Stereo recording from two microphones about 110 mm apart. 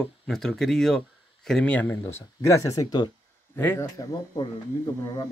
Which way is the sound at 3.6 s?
20° left (ahead or behind).